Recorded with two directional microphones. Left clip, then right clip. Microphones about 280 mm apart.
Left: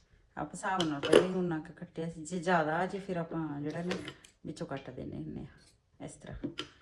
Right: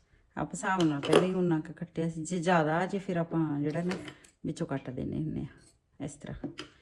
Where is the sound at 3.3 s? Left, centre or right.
Right.